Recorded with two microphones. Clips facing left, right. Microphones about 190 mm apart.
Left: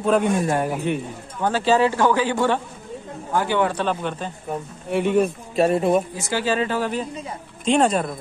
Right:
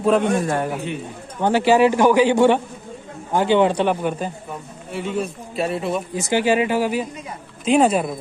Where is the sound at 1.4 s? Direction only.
15° right (ahead or behind).